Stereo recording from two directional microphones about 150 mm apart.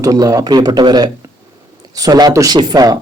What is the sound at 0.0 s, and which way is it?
A man's voice, 25° right (ahead or behind).